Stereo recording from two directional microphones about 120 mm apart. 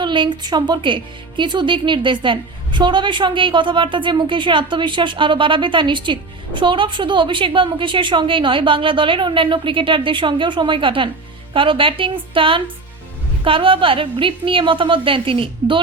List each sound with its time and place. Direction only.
0.0 s a woman's voice: 40° right (ahead or behind)